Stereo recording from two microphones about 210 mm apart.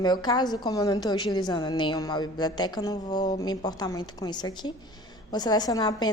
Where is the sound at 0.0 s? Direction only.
20° left (ahead or behind).